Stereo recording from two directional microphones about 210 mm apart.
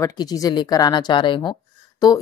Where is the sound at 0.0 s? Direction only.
20° left (ahead or behind).